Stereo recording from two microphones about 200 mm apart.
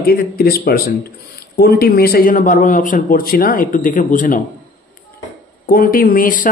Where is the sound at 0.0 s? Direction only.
50° left (ahead or behind).